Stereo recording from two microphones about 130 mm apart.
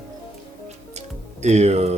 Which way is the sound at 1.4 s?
60° right (ahead or behind).